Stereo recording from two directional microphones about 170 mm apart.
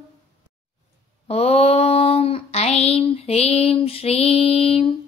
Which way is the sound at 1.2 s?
40° left (ahead or behind).